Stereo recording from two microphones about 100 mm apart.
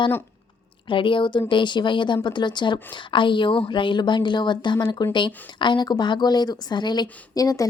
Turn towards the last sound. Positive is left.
turn(degrees=35)  # may be behind; listen again after turning